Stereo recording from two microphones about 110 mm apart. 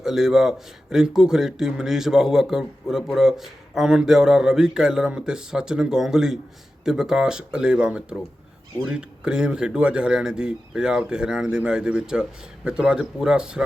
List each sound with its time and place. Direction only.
0.0 s speech: 5° right (ahead or behind)